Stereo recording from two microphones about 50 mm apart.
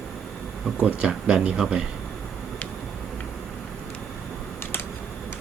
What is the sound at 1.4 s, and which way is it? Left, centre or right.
Speech, centre.